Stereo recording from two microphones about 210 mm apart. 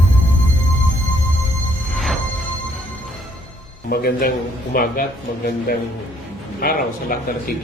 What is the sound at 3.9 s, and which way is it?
Speech, 45° left (ahead or behind).